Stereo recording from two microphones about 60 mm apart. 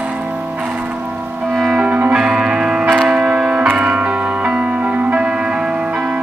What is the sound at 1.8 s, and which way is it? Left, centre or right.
Music, right.